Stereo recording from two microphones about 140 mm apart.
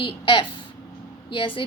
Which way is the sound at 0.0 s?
35° left (ahead or behind).